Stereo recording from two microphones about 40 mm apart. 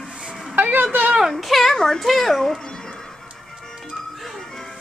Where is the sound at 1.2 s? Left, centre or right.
Centre.